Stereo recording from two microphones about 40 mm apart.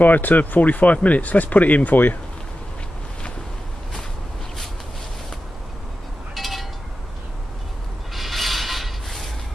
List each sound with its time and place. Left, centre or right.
0.0 s speech: left
6.3 s a sound: centre
8.1 s mechanisms: centre